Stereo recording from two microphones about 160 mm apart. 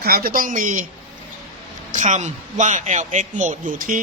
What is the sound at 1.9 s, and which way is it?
A man's voice, 50° right (ahead or behind).